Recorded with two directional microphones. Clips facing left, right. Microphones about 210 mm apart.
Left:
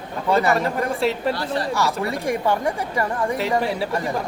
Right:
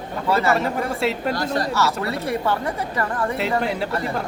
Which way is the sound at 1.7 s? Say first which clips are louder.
Even; 15° left (ahead or behind).